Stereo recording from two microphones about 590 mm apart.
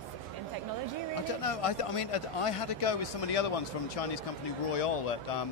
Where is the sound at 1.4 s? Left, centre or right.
Left.